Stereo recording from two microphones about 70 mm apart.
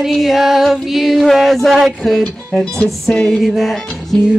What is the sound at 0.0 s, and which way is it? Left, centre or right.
Female singing, centre.